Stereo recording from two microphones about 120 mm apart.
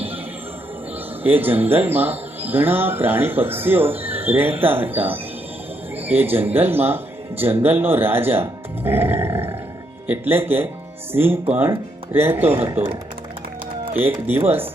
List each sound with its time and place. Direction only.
1.2 s speech: 15° right (ahead or behind)
13.9 s speech: 15° right (ahead or behind)